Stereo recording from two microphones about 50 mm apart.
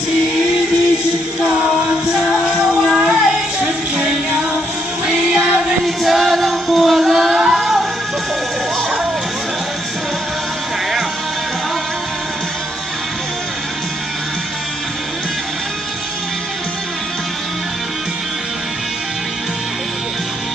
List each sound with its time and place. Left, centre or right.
1.6 s music: right
2.6 s child singing: centre
3.6 s music: right
5.0 s music: centre